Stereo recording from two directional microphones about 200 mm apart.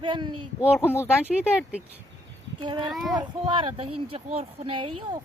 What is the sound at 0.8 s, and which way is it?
Speech, 10° left (ahead or behind).